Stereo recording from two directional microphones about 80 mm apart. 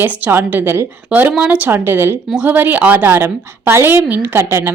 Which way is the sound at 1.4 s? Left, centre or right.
Centre.